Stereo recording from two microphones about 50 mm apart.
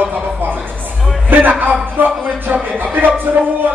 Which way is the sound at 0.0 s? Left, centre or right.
Right.